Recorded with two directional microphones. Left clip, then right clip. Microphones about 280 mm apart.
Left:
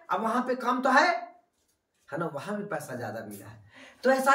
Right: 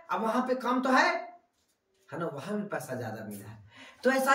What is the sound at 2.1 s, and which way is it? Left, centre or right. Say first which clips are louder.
A man's voice: left 2 dB; centre.